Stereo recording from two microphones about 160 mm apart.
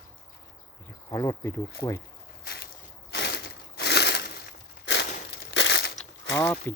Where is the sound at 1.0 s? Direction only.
20° left (ahead or behind).